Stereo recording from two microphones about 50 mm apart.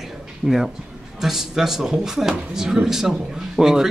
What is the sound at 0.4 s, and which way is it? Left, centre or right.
Speech, right.